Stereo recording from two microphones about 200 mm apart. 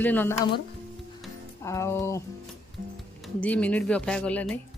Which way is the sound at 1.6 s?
15° left (ahead or behind).